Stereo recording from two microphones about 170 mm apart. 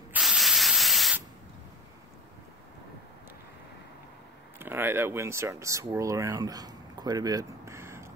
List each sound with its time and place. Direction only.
0.1 s spray: centre (ahead or behind)
4.6 s speech: 15° right (ahead or behind)